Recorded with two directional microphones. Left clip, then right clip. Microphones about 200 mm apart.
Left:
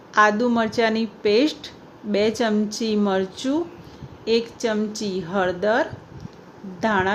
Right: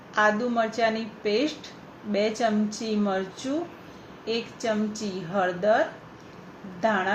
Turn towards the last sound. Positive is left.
turn(degrees=55)  # may be behind; listen again after turning